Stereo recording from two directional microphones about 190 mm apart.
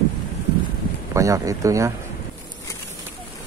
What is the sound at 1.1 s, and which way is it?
Speech, 15° right (ahead or behind).